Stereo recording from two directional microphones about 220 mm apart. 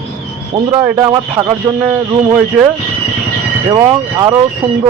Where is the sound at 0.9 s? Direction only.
15° right (ahead or behind).